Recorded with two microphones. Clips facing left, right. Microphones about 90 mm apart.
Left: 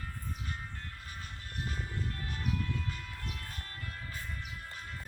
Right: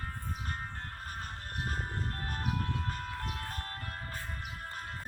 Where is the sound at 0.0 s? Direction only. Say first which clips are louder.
Right 3 dB; 45° right (ahead or behind).